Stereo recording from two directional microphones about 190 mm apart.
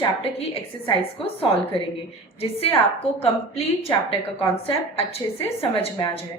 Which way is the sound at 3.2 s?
30° left (ahead or behind).